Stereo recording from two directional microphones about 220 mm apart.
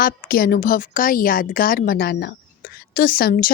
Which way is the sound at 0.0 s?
40° left (ahead or behind).